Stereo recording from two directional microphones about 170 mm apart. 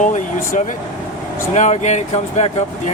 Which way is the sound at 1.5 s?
45° left (ahead or behind).